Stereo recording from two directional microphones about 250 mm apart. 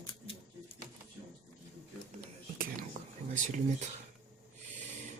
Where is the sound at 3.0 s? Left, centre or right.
Right.